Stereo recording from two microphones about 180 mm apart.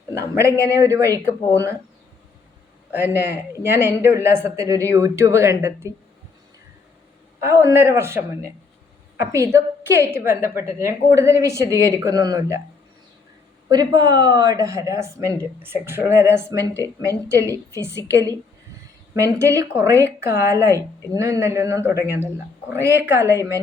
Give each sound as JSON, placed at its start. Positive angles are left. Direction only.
{"t": 0.1, "sound": "a sound", "side_deg": -15}
{"t": 0.7, "sound": "speech", "side_deg": -15}
{"t": 3.0, "sound": "speech", "side_deg": -10}
{"t": 7.4, "sound": "speech", "side_deg": -15}
{"t": 13.7, "sound": "speech", "side_deg": -20}